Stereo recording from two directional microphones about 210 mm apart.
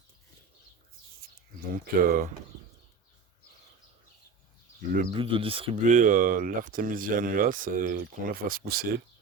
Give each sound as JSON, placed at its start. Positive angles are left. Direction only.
{"t": 1.7, "sound": "speech", "side_deg": -45}
{"t": 5.1, "sound": "speech", "side_deg": -25}